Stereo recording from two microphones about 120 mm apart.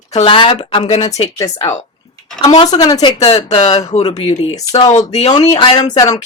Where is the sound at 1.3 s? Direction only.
30° left (ahead or behind).